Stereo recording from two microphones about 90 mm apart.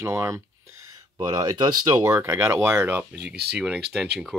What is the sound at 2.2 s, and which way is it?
Speech, 30° right (ahead or behind).